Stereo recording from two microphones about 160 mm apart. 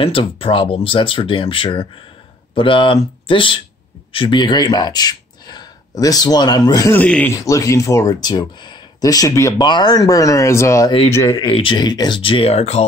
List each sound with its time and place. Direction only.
0.0 s speech: 35° left (ahead or behind); by 7.3 s 10° left (ahead or behind)
7.3 s speech: 20° left (ahead or behind)
10.9 s speech: 40° left (ahead or behind)